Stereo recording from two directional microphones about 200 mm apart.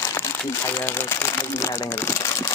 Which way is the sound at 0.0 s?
15° left (ahead or behind).